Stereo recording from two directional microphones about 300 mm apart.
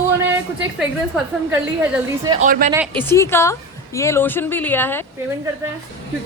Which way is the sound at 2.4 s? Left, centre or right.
Right.